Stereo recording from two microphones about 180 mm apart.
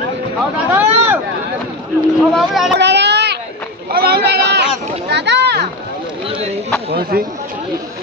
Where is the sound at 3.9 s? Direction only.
60° right (ahead or behind).